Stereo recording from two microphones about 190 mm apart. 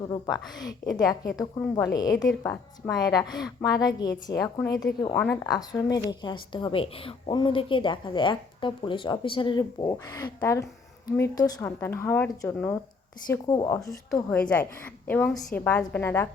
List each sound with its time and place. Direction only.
0.6 s a woman's voice: 20° left (ahead or behind)
5.4 s a woman's voice: 20° left (ahead or behind)
14.3 s a woman's voice: 5° left (ahead or behind)